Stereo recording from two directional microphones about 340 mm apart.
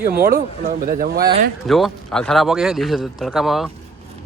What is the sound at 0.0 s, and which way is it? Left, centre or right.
Speech, right.